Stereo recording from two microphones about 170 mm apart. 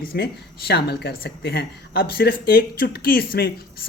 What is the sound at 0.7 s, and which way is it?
A woman's voice, 75° left (ahead or behind).